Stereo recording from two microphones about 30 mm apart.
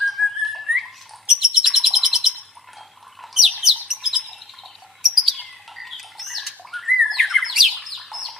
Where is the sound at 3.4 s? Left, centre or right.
Centre.